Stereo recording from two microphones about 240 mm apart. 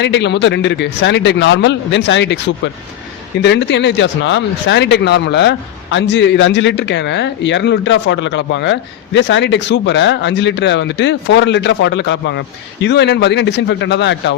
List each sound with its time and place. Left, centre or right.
0.0 s speech: left
3.4 s speech: left